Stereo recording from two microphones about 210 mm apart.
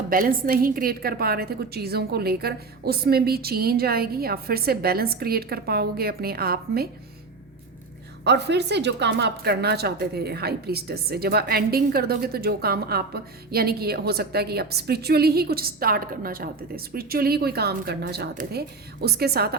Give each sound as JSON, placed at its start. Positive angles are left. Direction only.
{"t": 0.1, "sound": "speech", "side_deg": -45}
{"t": 8.2, "sound": "speech", "side_deg": -55}